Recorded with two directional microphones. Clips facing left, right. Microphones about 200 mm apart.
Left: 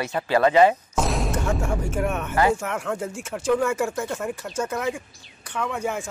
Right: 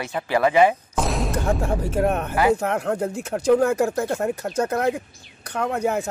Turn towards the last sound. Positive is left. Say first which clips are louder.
# right 4 dB
turn(degrees=-40)  # may be behind; listen again after turning